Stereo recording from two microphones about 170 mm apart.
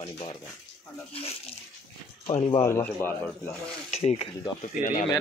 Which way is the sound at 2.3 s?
30° left (ahead or behind).